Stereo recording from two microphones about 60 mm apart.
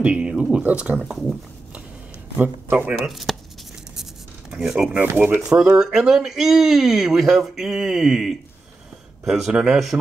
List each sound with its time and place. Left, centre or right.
0.0 s speech: centre
2.3 s speech: right
3.1 s speech: centre
3.9 s writing: centre
4.9 s speech: right
5.5 s speech: centre